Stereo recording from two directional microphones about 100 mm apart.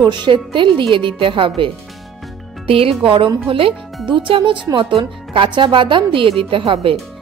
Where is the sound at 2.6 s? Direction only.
70° right (ahead or behind).